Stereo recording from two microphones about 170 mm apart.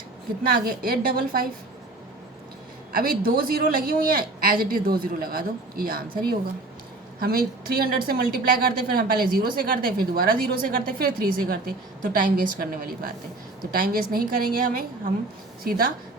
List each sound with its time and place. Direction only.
0.6 s a woman's voice: 60° right (ahead or behind)
2.9 s a woman's voice: 60° right (ahead or behind)
7.2 s a woman's voice: 60° right (ahead or behind)